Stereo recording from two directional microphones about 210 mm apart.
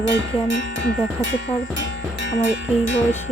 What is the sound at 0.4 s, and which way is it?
Speech, 60° left (ahead or behind).